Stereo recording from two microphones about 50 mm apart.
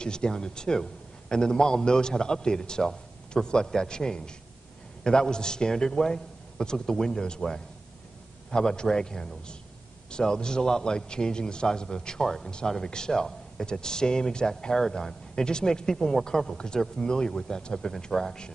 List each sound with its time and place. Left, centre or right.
0.0 s speech: centre